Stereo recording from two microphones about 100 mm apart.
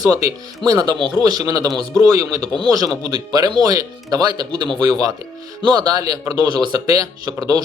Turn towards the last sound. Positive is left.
turn(degrees=-40)  # may be behind; listen again after turning